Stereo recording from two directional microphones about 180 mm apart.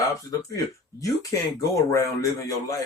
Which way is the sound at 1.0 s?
20° left (ahead or behind).